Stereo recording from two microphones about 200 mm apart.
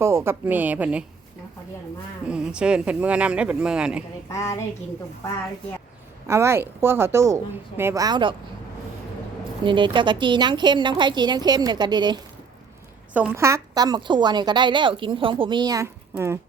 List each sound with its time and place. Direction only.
0.0 s speech: 15° right (ahead or behind)
2.2 s speech: 5° right (ahead or behind)
4.3 s a sound: 15° left (ahead or behind)
6.2 s a woman's voice: 15° right (ahead or behind)
9.6 s a woman's voice: 25° right (ahead or behind)
13.1 s a woman's voice: 10° right (ahead or behind)